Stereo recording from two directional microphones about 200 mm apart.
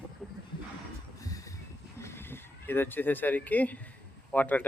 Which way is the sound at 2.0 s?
10° left (ahead or behind).